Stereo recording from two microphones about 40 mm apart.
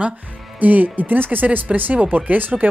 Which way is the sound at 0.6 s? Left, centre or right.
Right.